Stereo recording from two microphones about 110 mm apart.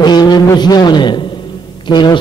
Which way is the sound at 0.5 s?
40° left (ahead or behind).